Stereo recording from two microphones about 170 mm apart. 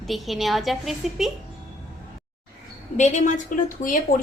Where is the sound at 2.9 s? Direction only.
45° left (ahead or behind).